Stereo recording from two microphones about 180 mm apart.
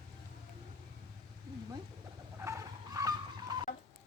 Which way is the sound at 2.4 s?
15° right (ahead or behind).